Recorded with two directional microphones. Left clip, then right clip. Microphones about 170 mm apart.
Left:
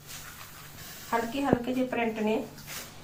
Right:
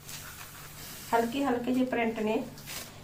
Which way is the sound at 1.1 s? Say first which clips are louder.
Even; 15° right (ahead or behind).